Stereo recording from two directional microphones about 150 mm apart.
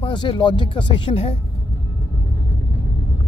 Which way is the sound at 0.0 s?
30° left (ahead or behind).